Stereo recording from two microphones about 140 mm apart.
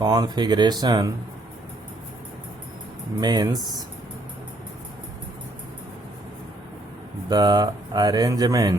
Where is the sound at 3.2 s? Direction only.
30° right (ahead or behind).